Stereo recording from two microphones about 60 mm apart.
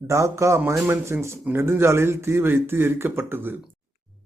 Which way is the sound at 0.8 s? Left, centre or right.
Right.